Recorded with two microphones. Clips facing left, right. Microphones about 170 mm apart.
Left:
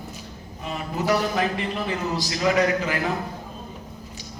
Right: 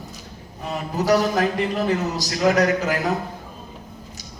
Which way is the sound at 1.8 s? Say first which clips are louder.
Right 4 dB; 40° right (ahead or behind).